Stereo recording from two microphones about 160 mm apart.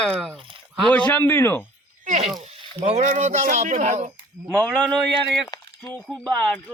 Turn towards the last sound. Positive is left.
turn(degrees=5)  # may be behind; listen again after turning